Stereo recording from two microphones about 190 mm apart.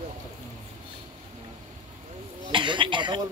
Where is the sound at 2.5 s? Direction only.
25° right (ahead or behind).